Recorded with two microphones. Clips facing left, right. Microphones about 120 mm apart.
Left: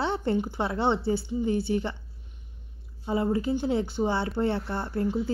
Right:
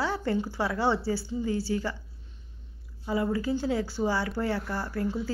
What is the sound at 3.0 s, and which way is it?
A woman's voice, 25° left (ahead or behind).